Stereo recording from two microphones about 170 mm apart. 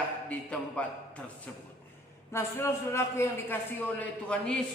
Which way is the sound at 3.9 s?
5° left (ahead or behind).